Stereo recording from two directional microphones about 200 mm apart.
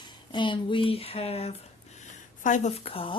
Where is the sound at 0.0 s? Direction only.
25° left (ahead or behind).